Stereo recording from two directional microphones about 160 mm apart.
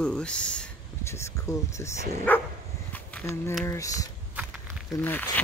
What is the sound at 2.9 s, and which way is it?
Walk, 10° left (ahead or behind).